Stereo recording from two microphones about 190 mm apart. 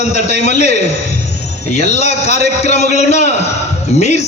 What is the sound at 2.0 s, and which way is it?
A man's voice, 35° left (ahead or behind).